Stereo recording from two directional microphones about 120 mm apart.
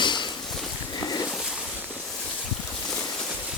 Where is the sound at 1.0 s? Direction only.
35° left (ahead or behind).